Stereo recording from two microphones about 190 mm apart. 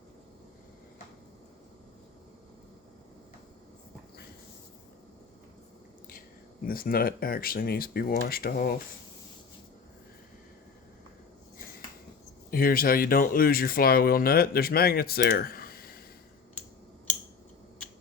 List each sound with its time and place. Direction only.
6.7 s speech: 50° left (ahead or behind)
12.5 s speech: 50° left (ahead or behind)